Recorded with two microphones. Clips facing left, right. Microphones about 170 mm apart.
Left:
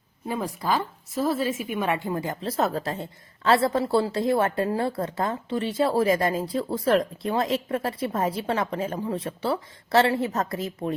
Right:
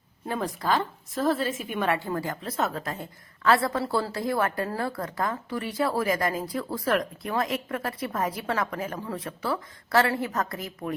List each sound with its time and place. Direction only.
0.3 s a woman's voice: 10° left (ahead or behind); by 10.9 s 25° left (ahead or behind)